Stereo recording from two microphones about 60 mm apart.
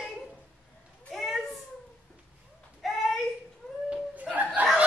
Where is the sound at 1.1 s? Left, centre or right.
Centre.